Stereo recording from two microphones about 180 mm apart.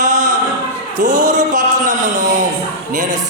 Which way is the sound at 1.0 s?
45° right (ahead or behind).